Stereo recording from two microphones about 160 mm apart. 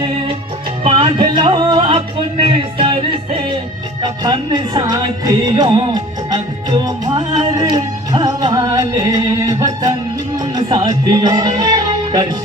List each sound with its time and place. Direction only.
0.9 s music: 30° right (ahead or behind)